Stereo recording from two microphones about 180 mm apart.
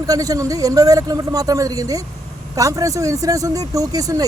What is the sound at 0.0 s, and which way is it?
Speech, 20° right (ahead or behind).